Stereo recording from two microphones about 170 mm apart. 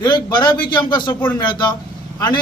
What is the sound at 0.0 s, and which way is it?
Speech, 25° left (ahead or behind).